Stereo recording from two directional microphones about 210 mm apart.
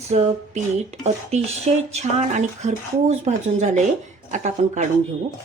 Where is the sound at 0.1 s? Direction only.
35° right (ahead or behind).